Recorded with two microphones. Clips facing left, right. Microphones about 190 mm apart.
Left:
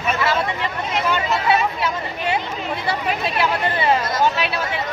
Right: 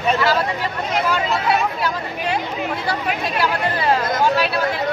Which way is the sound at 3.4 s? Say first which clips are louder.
Even; centre (ahead or behind).